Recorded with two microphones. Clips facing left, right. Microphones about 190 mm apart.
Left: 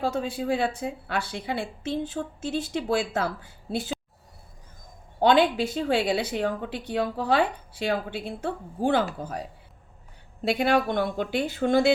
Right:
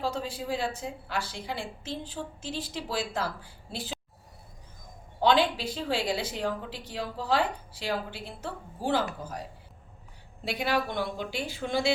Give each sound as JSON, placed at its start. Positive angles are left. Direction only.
{"t": 0.0, "sound": "a woman's voice", "side_deg": 60}
{"t": 5.2, "sound": "a woman's voice", "side_deg": 50}
{"t": 10.5, "sound": "speech", "side_deg": 50}